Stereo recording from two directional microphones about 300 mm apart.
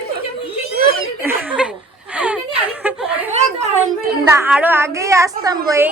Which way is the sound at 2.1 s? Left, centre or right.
Centre.